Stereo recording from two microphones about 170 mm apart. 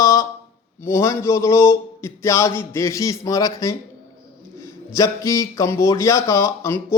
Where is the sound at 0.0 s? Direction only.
20° left (ahead or behind).